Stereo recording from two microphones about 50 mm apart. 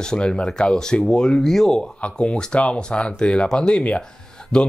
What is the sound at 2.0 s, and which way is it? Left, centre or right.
Speech, left.